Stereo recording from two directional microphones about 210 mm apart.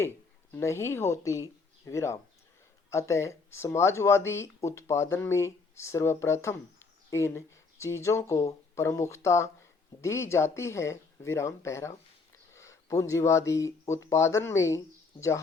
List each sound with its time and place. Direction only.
0.5 s speech: 15° left (ahead or behind)